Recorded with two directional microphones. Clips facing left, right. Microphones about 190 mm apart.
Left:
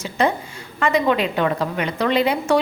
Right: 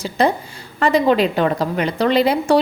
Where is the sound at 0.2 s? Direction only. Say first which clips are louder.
Right 2 dB; 35° right (ahead or behind).